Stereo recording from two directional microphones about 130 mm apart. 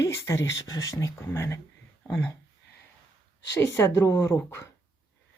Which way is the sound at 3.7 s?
20° left (ahead or behind).